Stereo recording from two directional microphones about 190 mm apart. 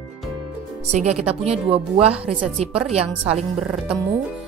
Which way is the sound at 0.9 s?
35° right (ahead or behind).